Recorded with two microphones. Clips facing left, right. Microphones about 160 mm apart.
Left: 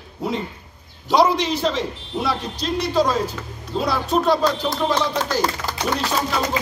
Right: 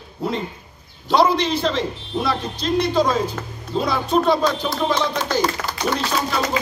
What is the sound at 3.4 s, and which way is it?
Speech, 50° right (ahead or behind).